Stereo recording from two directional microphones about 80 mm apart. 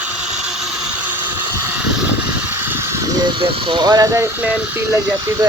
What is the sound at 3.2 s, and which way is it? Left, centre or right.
Speech, right.